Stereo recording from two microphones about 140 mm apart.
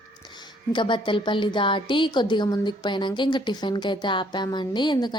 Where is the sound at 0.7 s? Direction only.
35° left (ahead or behind).